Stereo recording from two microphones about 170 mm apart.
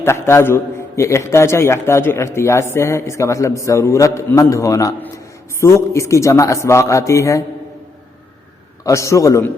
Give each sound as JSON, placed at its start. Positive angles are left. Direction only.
{"t": 0.0, "sound": "a man's voice", "side_deg": 15}
{"t": 8.8, "sound": "a man's voice", "side_deg": 15}